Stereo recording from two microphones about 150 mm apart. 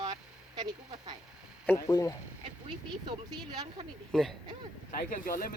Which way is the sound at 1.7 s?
20° left (ahead or behind).